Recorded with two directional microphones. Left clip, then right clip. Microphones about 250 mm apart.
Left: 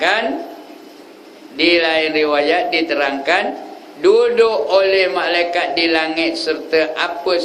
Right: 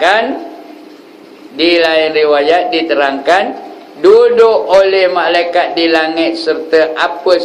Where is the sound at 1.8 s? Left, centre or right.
Right.